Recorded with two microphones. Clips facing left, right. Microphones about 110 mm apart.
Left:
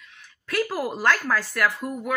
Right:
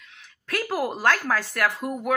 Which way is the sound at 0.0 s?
55° right (ahead or behind).